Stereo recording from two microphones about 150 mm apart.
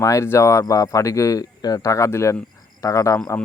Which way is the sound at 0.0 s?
20° left (ahead or behind).